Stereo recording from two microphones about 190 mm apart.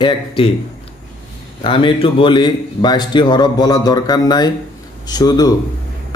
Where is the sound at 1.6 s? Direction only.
25° left (ahead or behind).